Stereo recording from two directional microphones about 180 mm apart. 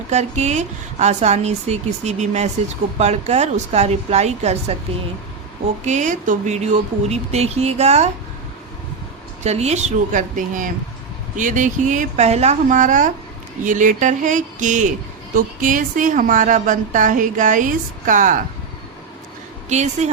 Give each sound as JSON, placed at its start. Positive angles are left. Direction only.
{"t": 0.1, "sound": "a woman's voice", "side_deg": -40}
{"t": 5.8, "sound": "a woman's voice", "side_deg": -40}
{"t": 9.4, "sound": "a woman's voice", "side_deg": -35}
{"t": 19.6, "sound": "a woman's voice", "side_deg": -40}